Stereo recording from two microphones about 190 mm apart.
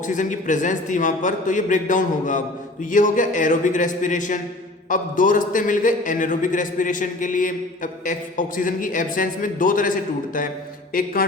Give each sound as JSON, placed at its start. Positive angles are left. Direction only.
{"t": 0.1, "sound": "a man's voice", "side_deg": 40}